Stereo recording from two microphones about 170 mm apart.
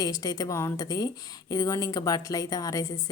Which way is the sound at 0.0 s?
20° left (ahead or behind).